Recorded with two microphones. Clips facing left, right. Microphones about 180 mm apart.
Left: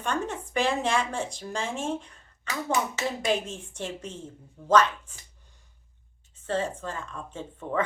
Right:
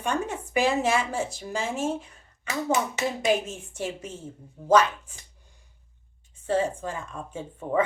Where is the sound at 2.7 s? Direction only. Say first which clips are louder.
Right 2 dB; 20° right (ahead or behind).